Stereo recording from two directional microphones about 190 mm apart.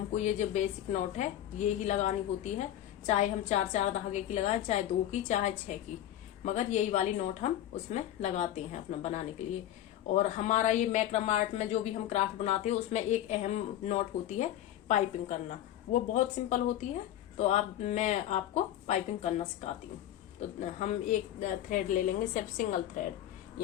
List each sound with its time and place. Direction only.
0.1 s a woman's voice: 40° left (ahead or behind)
10.3 s a woman's voice: 40° left (ahead or behind)
20.6 s a woman's voice: 40° left (ahead or behind)